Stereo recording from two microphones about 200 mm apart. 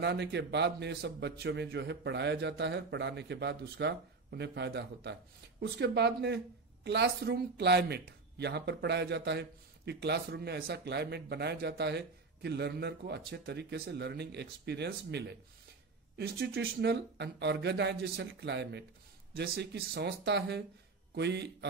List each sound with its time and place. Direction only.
0.0 s a man's voice: 60° right (ahead or behind)